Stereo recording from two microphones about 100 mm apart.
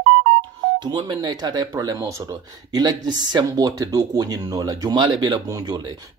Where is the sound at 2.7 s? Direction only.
45° right (ahead or behind).